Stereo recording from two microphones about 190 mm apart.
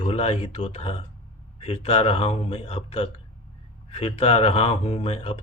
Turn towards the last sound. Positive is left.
turn(degrees=30)  # may be behind; listen again after turning